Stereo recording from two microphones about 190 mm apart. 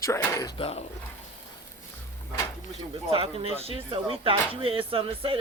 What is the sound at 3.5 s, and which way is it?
Speech, 30° right (ahead or behind).